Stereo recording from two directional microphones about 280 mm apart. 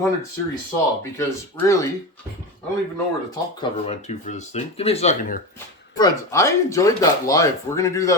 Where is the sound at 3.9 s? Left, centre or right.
Left.